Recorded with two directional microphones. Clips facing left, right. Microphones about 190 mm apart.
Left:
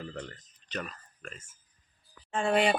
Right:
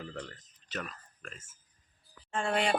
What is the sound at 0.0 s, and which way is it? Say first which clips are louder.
Speech: left 2 dB; 5° left (ahead or behind).